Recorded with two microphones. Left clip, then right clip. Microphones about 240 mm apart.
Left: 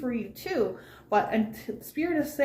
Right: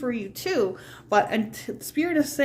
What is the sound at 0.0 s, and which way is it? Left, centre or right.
Speech, right.